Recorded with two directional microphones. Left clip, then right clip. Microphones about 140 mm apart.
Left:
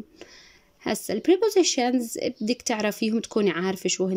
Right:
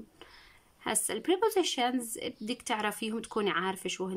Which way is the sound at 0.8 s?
25° left (ahead or behind).